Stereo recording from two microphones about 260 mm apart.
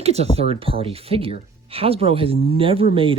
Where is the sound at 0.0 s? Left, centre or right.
Right.